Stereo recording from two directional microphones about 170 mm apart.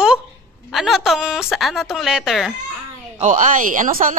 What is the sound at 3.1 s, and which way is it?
Speech, 45° right (ahead or behind).